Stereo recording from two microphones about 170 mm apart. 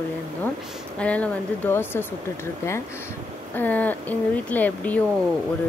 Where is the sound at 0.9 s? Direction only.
5° left (ahead or behind).